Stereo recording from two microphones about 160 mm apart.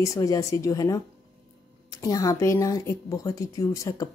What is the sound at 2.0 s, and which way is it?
A woman's voice, 20° left (ahead or behind).